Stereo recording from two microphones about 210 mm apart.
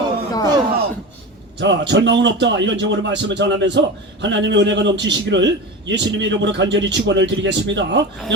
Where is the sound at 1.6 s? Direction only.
60° right (ahead or behind).